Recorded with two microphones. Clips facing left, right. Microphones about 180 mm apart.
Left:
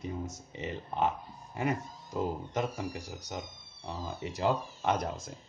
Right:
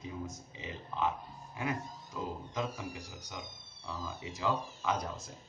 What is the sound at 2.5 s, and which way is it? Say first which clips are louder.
Speech: left 4 dB; 70° left (ahead or behind).